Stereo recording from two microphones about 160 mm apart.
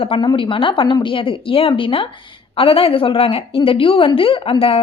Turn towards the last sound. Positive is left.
turn(degrees=35)  # may be behind; listen again after turning